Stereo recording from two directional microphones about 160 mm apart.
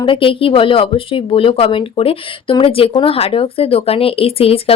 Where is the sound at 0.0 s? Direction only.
30° left (ahead or behind).